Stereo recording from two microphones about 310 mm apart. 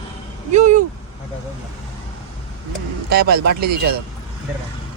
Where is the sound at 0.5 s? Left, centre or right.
Right.